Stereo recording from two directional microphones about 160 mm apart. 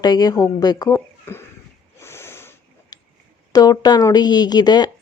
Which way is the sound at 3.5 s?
25° left (ahead or behind).